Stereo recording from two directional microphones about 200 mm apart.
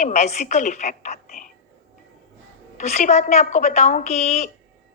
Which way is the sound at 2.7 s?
35° left (ahead or behind).